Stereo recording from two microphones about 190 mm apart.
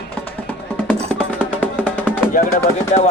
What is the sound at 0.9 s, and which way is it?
Music, 10° left (ahead or behind).